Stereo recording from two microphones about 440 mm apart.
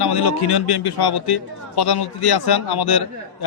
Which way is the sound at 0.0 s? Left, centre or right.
Left.